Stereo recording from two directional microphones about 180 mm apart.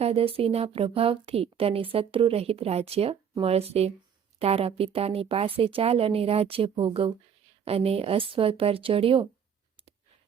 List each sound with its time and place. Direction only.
0.0 s speech: 35° right (ahead or behind)